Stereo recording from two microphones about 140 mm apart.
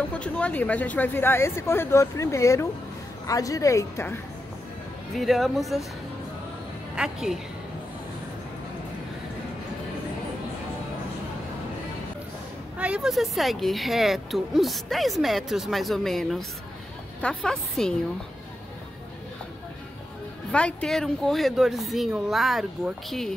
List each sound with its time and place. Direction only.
0.1 s a woman's voice: 10° left (ahead or behind)
5.1 s speech: centre (ahead or behind)
7.0 s speech: centre (ahead or behind)
12.7 s speech: 10° right (ahead or behind)
20.5 s speech: 5° left (ahead or behind)